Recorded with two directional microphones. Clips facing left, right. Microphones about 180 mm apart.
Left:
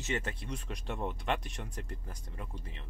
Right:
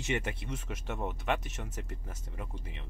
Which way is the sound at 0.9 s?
15° right (ahead or behind).